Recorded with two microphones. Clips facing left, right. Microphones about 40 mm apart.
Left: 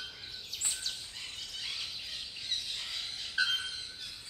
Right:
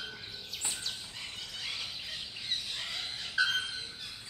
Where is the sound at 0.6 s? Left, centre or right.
Centre.